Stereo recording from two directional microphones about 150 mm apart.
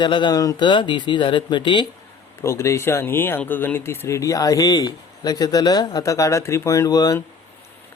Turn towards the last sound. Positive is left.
turn(degrees=25)  # may be behind; listen again after turning